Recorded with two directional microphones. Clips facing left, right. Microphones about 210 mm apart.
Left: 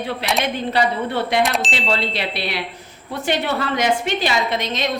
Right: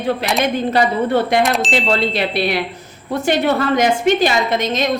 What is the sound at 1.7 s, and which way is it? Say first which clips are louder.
Speech: right 5 dB; 45° right (ahead or behind).